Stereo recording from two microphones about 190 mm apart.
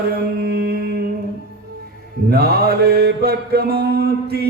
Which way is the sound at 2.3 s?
55° right (ahead or behind).